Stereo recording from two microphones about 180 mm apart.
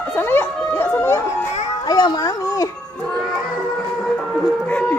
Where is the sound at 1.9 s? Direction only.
25° left (ahead or behind).